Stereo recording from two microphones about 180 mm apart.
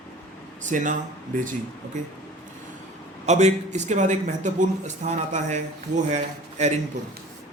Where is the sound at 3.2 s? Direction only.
40° right (ahead or behind).